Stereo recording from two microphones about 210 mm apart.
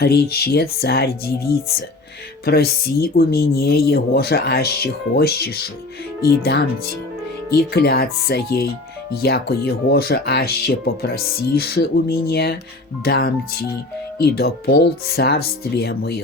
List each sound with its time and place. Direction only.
0.0 s speech: 45° left (ahead or behind)